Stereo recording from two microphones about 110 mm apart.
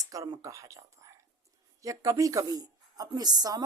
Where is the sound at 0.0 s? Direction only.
30° right (ahead or behind).